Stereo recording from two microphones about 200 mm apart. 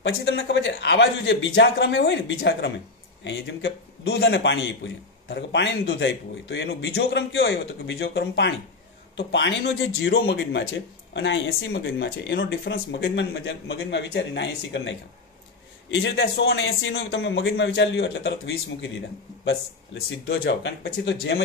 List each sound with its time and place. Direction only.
0.0 s a man's voice: 65° left (ahead or behind)
11.1 s a man's voice: 65° left (ahead or behind)